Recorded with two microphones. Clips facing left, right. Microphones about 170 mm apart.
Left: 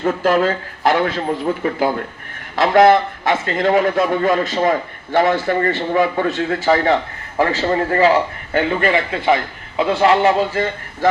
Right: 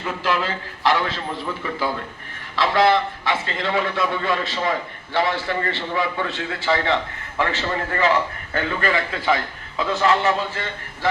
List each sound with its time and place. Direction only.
0.0 s a man's voice: 45° left (ahead or behind)